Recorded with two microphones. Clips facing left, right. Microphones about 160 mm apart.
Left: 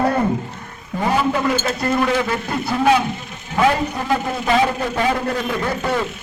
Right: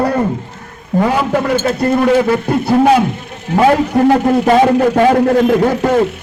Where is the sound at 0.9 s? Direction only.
40° right (ahead or behind).